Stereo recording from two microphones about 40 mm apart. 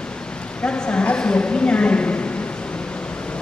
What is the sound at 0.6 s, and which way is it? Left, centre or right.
A woman's voice, left.